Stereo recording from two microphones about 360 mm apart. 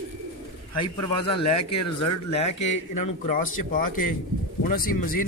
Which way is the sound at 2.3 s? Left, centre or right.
Centre.